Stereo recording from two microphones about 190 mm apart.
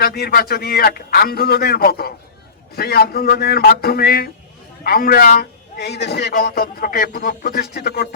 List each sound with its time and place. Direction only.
0.0 s a man's voice: 55° left (ahead or behind)